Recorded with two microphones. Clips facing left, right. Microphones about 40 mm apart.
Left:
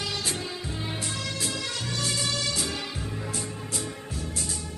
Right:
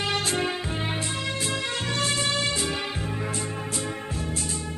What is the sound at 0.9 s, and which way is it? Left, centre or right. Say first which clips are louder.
Music: right 4 dB; right.